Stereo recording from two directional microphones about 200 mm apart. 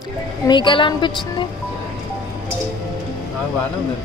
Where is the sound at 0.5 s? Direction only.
25° left (ahead or behind).